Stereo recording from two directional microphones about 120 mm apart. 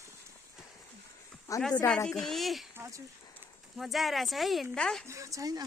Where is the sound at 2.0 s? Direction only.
5° left (ahead or behind).